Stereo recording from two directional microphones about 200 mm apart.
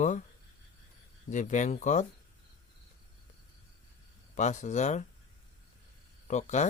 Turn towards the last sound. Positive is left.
turn(degrees=35)  # may be behind; listen again after turning